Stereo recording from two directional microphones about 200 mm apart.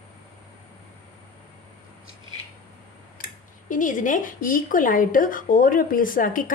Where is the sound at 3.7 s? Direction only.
40° left (ahead or behind).